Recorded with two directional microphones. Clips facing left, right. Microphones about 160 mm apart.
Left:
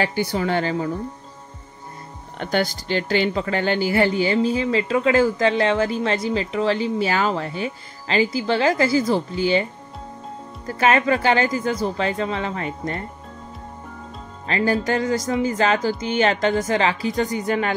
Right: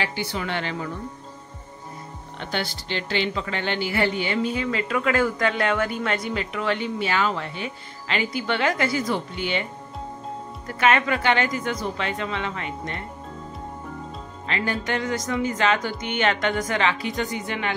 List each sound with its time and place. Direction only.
0.0 s speech: 45° left (ahead or behind)
2.3 s speech: 45° left (ahead or behind)
10.7 s speech: 35° left (ahead or behind)
14.5 s speech: 35° left (ahead or behind)